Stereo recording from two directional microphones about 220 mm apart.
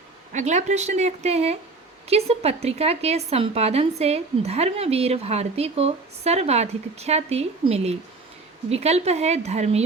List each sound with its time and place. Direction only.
0.3 s a woman's voice: 30° right (ahead or behind)